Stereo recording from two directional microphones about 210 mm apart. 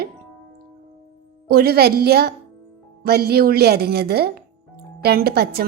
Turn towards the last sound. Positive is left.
turn(degrees=-50)  # may be behind; listen again after turning